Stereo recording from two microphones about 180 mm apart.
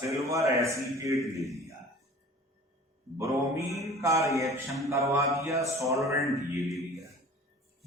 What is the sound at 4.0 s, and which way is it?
A man's voice, 15° right (ahead or behind).